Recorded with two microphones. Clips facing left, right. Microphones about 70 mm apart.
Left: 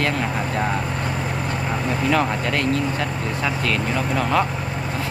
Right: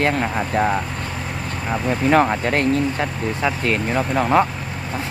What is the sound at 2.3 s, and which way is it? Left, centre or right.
Speech, right.